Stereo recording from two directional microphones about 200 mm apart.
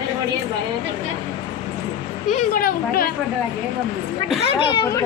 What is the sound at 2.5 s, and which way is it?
Speech, 45° left (ahead or behind).